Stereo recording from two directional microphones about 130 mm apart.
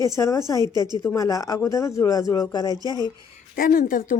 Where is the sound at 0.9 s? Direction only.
25° left (ahead or behind).